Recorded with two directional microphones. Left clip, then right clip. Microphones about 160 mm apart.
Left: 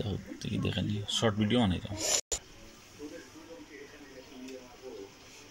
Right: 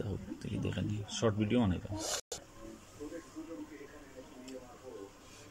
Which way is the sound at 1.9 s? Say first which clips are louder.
Left 6 dB; 20° left (ahead or behind).